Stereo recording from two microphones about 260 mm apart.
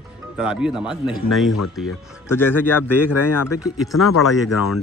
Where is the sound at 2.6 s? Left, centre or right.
Left.